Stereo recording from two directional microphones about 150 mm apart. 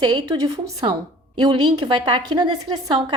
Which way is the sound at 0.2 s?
30° right (ahead or behind).